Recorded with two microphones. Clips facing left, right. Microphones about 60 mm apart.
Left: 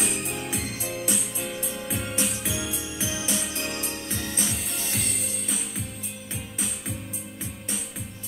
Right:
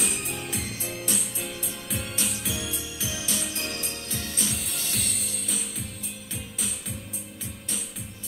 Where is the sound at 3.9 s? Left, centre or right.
Left.